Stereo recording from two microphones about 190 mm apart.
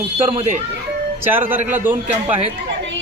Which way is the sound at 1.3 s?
10° right (ahead or behind).